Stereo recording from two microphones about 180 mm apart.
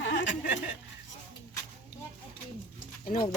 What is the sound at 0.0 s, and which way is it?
Chuckle, 90° left.